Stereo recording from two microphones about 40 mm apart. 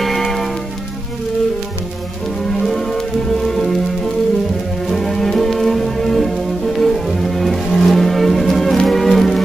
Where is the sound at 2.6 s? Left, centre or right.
Centre.